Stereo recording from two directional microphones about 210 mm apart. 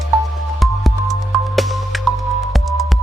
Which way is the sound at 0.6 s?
Centre (ahead or behind).